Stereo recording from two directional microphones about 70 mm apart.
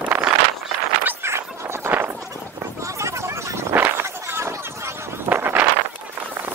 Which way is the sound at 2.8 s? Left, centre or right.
Right.